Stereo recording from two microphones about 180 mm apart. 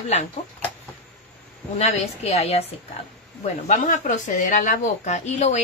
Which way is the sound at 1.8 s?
35° left (ahead or behind).